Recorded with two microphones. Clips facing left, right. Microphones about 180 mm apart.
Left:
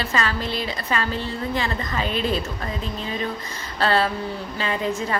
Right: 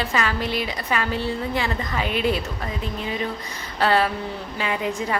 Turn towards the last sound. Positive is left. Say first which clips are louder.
# even
turn(degrees=-15)  # may be behind; listen again after turning